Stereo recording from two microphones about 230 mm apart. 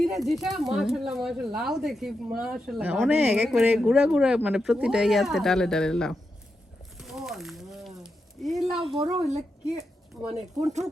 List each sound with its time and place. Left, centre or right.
0.0 s speech: centre
7.0 s a sound: centre
8.4 s speech: centre
9.0 s a woman's voice: right